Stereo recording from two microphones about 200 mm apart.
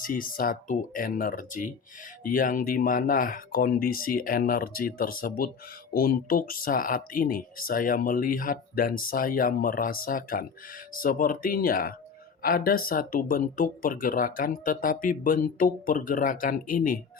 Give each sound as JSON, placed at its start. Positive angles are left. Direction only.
{"t": 0.0, "sound": "speech", "side_deg": 45}